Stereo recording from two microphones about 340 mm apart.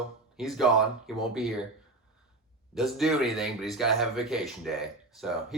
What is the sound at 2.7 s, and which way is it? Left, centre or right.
Mantra, centre.